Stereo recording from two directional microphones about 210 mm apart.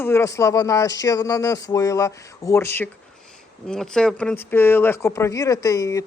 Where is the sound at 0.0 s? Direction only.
10° left (ahead or behind).